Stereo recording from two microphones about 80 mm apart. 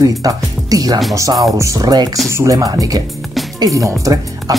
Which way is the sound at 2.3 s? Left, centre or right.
Right.